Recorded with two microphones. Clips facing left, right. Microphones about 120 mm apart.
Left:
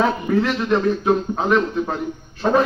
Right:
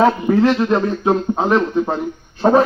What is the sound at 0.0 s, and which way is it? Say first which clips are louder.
Speech: right 5 dB; 30° right (ahead or behind).